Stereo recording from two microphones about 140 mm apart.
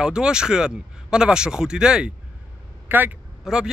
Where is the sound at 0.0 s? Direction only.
5° right (ahead or behind).